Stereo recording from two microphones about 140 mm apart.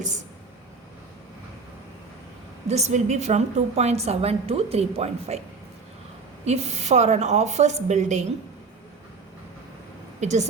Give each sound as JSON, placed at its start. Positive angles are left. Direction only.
{"t": 2.9, "sound": "a woman's voice", "side_deg": -55}
{"t": 6.4, "sound": "a woman's voice", "side_deg": -50}
{"t": 10.2, "sound": "a woman's voice", "side_deg": -55}